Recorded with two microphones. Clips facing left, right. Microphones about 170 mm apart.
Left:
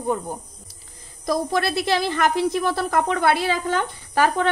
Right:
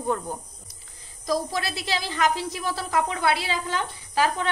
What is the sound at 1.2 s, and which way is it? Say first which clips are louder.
Speech: left 4 dB; 55° left (ahead or behind).